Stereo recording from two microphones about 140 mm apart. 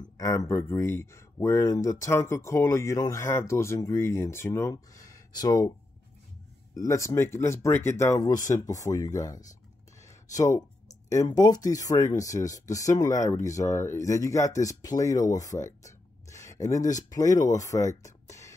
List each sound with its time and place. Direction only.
0.2 s speech: 20° left (ahead or behind)
6.7 s speech: 20° left (ahead or behind)
10.0 s a sound: 20° left (ahead or behind)
11.2 s speech: 25° left (ahead or behind)